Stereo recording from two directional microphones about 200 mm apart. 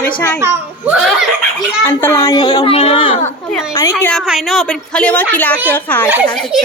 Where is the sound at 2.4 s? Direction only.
30° left (ahead or behind).